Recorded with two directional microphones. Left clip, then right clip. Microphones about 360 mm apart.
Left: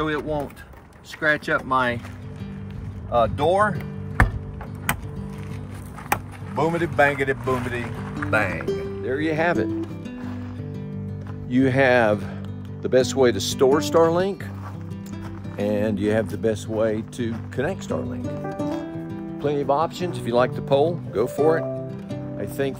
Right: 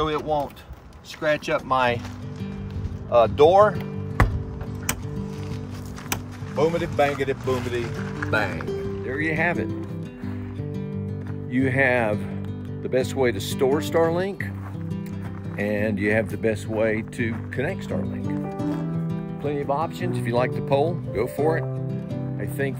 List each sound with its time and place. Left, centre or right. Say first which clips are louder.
0.0 s speech: right 1 dB; centre
3.1 s speech: right 4 dB; centre
6.6 s speech: left 2 dB; centre
9.0 s speech: left 2 dB; centre
11.5 s speech: left 3 dB; centre
15.5 s speech: left 1 dB; centre
18.2 s music: left 1 dB; centre
19.4 s speech: left 4 dB; centre
22.4 s music: left 3 dB; centre